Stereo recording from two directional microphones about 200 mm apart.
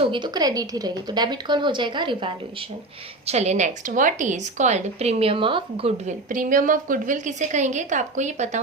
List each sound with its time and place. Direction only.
0.0 s a woman's voice: 25° right (ahead or behind)
3.2 s a woman's voice: 35° right (ahead or behind)